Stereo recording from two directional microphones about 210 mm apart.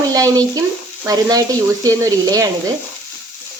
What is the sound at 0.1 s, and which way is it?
Speech, 15° right (ahead or behind).